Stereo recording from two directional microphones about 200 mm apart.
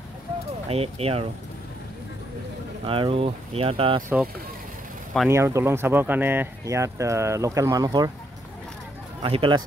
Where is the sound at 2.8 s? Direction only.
25° right (ahead or behind).